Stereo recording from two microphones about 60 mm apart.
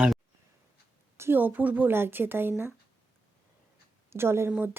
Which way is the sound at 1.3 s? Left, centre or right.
Right.